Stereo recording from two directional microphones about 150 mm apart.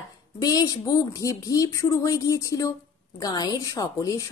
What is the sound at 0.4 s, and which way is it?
A woman's voice, 25° left (ahead or behind).